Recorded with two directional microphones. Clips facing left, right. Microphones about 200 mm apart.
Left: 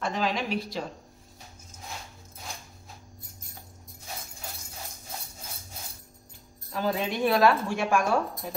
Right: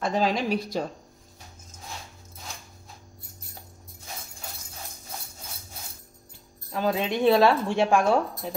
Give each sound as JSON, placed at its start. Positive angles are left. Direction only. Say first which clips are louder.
{"t": 0.0, "sound": "a woman's voice", "louder": "right 4 dB", "side_deg": -40}
{"t": 6.7, "sound": "a woman's voice", "louder": "right 3 dB", "side_deg": -20}